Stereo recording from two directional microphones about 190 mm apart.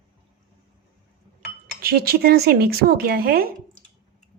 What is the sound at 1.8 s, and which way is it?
Speech, 50° right (ahead or behind).